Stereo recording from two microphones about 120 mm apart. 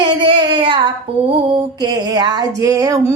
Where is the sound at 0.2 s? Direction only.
45° right (ahead or behind).